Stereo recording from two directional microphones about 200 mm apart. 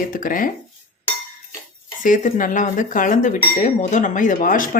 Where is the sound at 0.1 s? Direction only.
45° left (ahead or behind).